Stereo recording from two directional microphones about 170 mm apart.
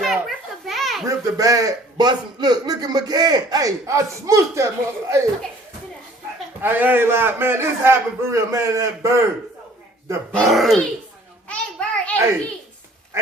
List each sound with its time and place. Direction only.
0.0 s children playing: centre (ahead or behind)
1.0 s a man's voice: 20° right (ahead or behind)
6.6 s a man's voice: 10° right (ahead or behind)
10.3 s a child's voice: centre (ahead or behind)
11.4 s a sound: 5° left (ahead or behind)